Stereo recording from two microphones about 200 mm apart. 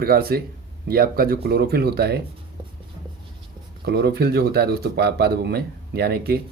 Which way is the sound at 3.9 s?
50° right (ahead or behind).